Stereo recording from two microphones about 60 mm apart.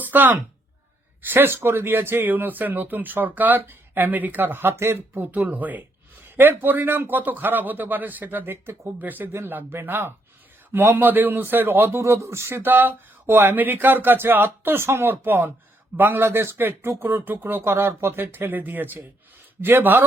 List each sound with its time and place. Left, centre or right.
0.0 s speech: right
5.2 s speech: right
17.6 s speech: right